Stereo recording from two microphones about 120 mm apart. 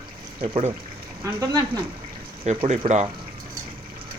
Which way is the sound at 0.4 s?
60° right (ahead or behind).